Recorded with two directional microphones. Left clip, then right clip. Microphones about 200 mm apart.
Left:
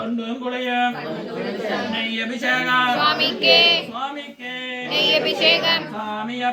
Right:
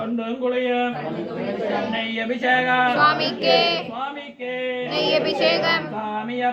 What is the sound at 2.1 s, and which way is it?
Speech, 40° left (ahead or behind).